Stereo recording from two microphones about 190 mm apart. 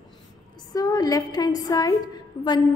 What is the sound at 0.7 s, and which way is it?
A woman's voice, 20° left (ahead or behind).